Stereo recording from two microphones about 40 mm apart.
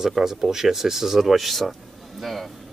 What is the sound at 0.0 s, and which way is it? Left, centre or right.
Speech, centre.